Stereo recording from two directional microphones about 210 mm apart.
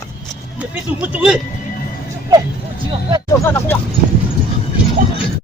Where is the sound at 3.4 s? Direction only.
10° left (ahead or behind).